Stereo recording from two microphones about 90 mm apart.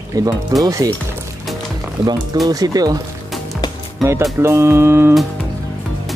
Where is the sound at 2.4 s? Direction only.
45° right (ahead or behind).